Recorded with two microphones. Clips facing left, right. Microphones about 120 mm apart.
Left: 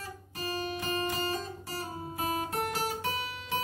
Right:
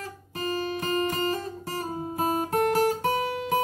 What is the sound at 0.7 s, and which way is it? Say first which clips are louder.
Guitar: right 6 dB; 50° right (ahead or behind).